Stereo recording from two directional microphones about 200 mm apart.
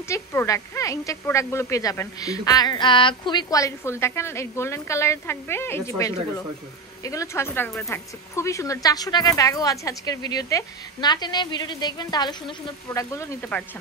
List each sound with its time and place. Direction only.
0.1 s a woman's voice: 15° left (ahead or behind)